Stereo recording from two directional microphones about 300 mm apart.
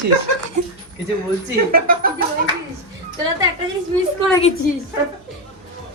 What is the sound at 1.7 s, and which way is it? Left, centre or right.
Speech, right.